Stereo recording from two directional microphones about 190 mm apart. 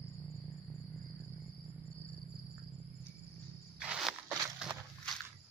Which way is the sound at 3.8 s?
5° right (ahead or behind).